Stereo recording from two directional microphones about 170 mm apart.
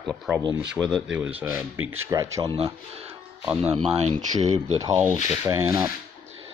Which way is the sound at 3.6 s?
35° right (ahead or behind).